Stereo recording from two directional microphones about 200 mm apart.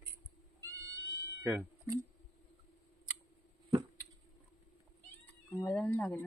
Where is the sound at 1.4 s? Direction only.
15° right (ahead or behind).